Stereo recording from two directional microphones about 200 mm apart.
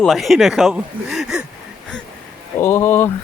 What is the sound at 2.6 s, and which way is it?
Speech, 10° left (ahead or behind).